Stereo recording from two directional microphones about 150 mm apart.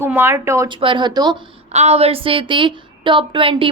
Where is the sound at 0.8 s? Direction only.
35° right (ahead or behind).